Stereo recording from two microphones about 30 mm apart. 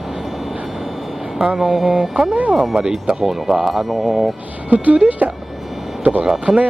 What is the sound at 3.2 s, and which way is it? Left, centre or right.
Speech, centre.